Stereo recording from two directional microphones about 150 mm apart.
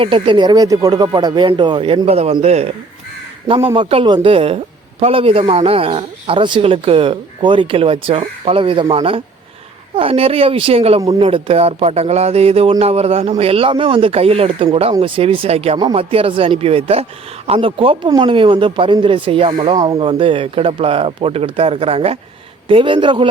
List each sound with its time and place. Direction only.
0.0 s speech: 35° right (ahead or behind)
3.8 s speech: 35° right (ahead or behind)
20.1 s speech: 35° right (ahead or behind)